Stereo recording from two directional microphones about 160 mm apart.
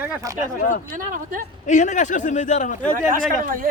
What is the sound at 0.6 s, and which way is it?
Speech, 55° left (ahead or behind).